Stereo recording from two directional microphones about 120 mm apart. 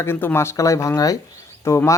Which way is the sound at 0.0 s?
20° left (ahead or behind).